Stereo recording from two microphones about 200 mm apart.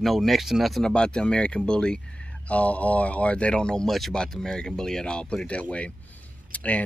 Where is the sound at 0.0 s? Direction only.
Centre (ahead or behind).